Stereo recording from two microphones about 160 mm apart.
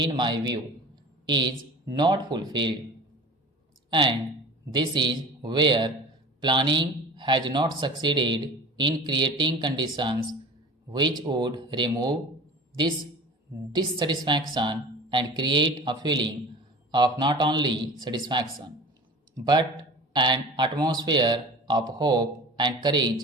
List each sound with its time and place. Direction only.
0.0 s speech: 25° right (ahead or behind)
3.8 s speech: 30° right (ahead or behind)
13.7 s speech: 25° right (ahead or behind)
19.5 s speech: 30° right (ahead or behind)